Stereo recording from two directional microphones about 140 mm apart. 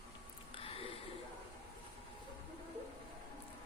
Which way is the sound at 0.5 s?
40° left (ahead or behind).